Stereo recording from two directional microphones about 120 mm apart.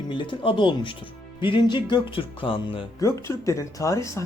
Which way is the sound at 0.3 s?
40° left (ahead or behind).